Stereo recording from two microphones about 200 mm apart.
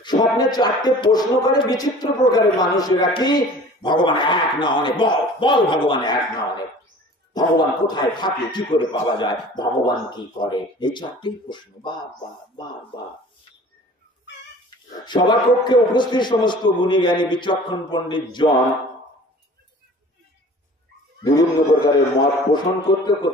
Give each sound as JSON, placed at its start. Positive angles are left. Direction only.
{"t": 0.0, "sound": "music", "side_deg": 20}
{"t": 15.0, "sound": "music", "side_deg": 20}
{"t": 21.2, "sound": "speech", "side_deg": 20}
{"t": 22.5, "sound": "music", "side_deg": 20}